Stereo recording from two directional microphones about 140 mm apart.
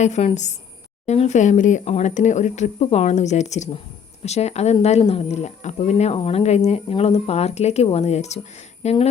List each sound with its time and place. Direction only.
0.0 s speech: 50° left (ahead or behind)